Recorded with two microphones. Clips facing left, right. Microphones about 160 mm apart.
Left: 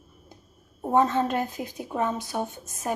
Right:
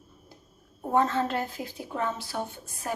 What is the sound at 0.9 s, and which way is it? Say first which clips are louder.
A woman's voice: left 3 dB; 15° left (ahead or behind).